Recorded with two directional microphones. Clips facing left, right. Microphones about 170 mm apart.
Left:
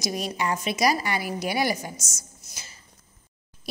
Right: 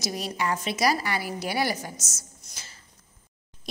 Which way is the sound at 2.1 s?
10° left (ahead or behind).